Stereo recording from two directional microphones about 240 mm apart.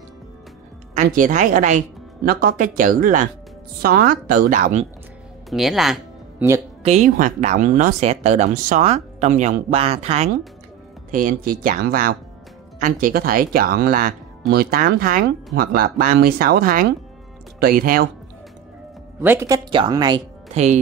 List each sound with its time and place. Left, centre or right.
0.9 s speech: right
5.5 s speech: centre
6.8 s speech: right
19.2 s speech: centre